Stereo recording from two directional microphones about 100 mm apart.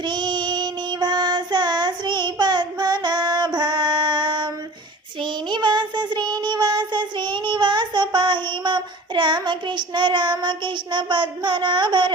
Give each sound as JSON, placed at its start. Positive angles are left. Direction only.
{"t": 0.0, "sound": "child singing", "side_deg": -50}